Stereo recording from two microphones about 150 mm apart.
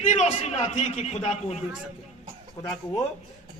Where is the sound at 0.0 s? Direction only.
50° left (ahead or behind).